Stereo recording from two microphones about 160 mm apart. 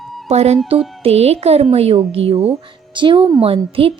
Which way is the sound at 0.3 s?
40° right (ahead or behind).